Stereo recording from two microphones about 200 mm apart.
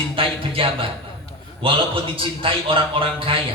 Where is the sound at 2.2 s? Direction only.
25° right (ahead or behind).